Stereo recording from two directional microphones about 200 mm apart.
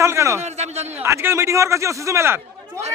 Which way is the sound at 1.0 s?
10° right (ahead or behind).